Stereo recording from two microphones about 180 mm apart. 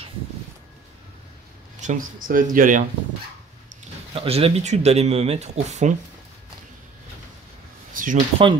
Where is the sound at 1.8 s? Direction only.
45° right (ahead or behind).